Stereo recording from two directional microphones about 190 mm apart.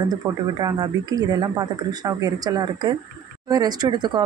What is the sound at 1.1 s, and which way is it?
Speech, 20° right (ahead or behind).